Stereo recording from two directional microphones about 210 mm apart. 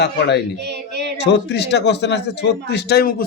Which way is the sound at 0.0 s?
55° left (ahead or behind).